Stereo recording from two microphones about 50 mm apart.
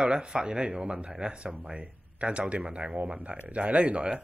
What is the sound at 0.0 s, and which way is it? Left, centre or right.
Speech, centre.